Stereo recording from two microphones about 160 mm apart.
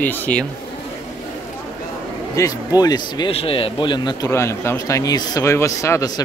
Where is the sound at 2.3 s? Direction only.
20° left (ahead or behind).